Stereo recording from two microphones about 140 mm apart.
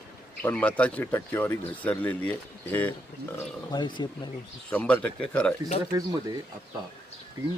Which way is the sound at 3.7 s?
35° left (ahead or behind).